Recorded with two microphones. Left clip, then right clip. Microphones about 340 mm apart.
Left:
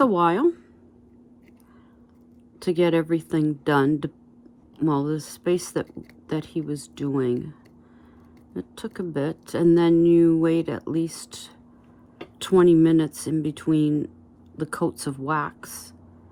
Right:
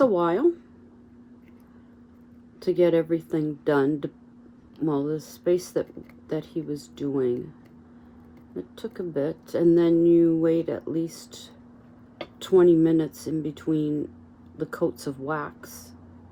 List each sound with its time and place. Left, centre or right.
0.0 s speech: left
2.6 s speech: left
8.5 s speech: left